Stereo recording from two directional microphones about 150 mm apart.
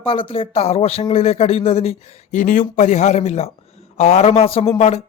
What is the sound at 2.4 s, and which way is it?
Speech, 60° left (ahead or behind).